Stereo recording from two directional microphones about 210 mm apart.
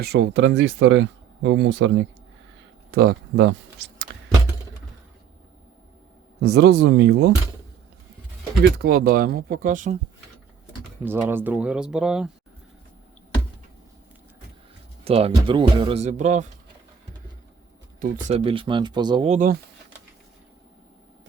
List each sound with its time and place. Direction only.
0.0 s speech: 55° right (ahead or behind)
2.9 s speech: 50° right (ahead or behind)
6.4 s speech: 50° right (ahead or behind)
8.8 s speech: 45° right (ahead or behind)
11.0 s speech: 10° right (ahead or behind)
15.0 s speech: 30° right (ahead or behind)
18.0 s speech: 30° right (ahead or behind)
19.3 s speech: 40° right (ahead or behind)